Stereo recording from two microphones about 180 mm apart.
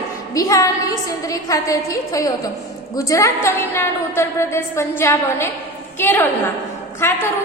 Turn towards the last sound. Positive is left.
turn(degrees=15)  # may be behind; listen again after turning